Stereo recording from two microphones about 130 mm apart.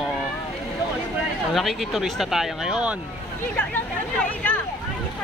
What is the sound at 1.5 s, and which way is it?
Speech, centre (ahead or behind).